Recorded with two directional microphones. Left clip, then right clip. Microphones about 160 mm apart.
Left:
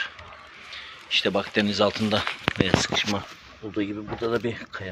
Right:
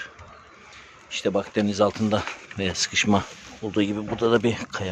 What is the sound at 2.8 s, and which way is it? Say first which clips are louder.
Speech: right 3 dB; 50° right (ahead or behind).